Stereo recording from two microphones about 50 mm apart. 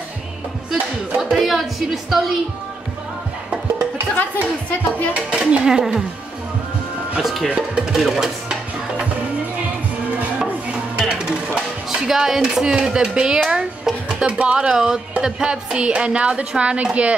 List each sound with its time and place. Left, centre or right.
1.3 s a woman's voice: centre
4.1 s a woman's voice: left
5.1 s speech: centre
7.4 s speech: centre
10.4 s music: centre
13.5 s speech: centre